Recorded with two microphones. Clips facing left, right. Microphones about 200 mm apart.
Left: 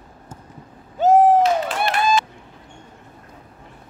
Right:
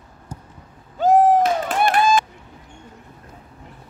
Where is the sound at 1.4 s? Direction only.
50° right (ahead or behind).